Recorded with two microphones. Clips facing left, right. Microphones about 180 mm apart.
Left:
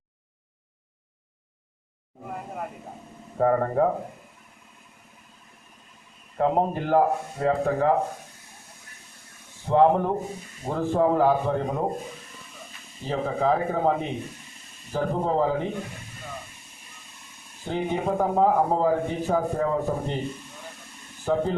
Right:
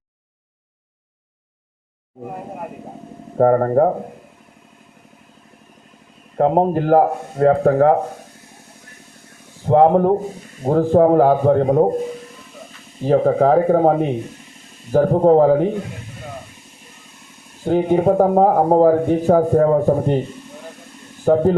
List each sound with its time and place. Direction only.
3.3 s a man's voice: 45° right (ahead or behind)
6.3 s a man's voice: 45° right (ahead or behind)
9.6 s a man's voice: 45° right (ahead or behind)
13.1 s a man's voice: 55° right (ahead or behind)
17.7 s a man's voice: 50° right (ahead or behind)
21.3 s a man's voice: 45° right (ahead or behind)